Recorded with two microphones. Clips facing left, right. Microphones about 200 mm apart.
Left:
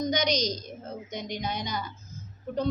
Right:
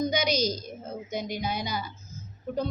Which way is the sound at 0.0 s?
5° right (ahead or behind).